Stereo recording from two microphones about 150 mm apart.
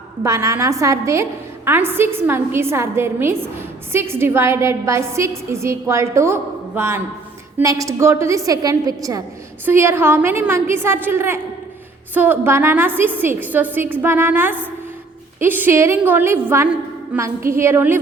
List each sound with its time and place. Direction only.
0.2 s a woman's voice: 20° right (ahead or behind)